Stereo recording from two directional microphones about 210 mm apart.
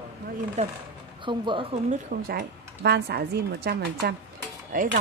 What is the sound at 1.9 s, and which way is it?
Speech, 45° right (ahead or behind).